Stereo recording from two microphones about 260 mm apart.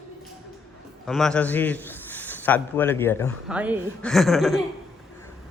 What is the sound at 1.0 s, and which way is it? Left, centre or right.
A man's voice, centre.